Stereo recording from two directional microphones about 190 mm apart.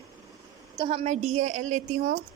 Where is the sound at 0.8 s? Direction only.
30° right (ahead or behind).